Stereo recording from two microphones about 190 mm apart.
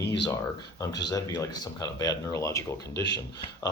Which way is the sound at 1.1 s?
20° left (ahead or behind).